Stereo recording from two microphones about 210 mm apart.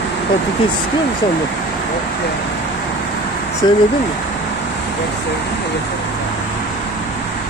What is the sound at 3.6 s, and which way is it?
Speech, 20° left (ahead or behind).